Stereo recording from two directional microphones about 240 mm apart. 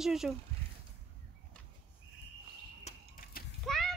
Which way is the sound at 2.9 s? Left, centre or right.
Left.